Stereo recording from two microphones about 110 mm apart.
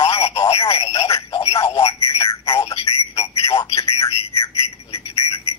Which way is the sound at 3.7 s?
65° left (ahead or behind).